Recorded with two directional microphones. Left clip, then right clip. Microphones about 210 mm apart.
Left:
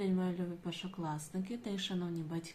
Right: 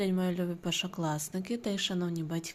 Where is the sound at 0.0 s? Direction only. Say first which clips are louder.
Right 5 dB; 45° right (ahead or behind).